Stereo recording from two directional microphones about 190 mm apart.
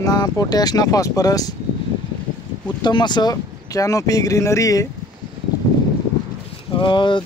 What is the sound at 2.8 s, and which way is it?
Speech, 25° left (ahead or behind).